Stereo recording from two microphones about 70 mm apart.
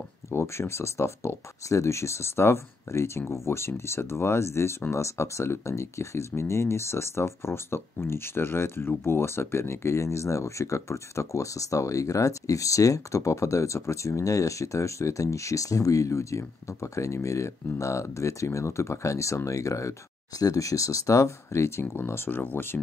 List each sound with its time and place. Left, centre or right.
0.3 s speech: left